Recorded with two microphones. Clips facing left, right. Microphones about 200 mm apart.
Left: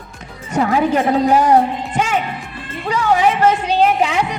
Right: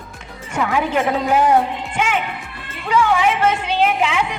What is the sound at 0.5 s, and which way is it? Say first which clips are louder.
A man's voice: left 4 dB; 35° left (ahead or behind).